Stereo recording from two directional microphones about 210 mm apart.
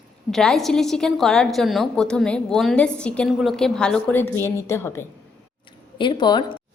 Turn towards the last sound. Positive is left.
turn(degrees=20)  # may be behind; listen again after turning